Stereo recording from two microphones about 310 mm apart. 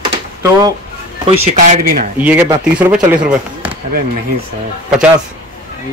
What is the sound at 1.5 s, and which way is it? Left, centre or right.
Speech, right.